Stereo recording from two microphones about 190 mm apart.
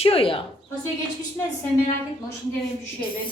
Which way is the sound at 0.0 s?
30° left (ahead or behind).